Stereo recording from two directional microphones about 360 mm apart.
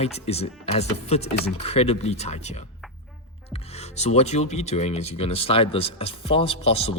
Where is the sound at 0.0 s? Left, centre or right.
Centre.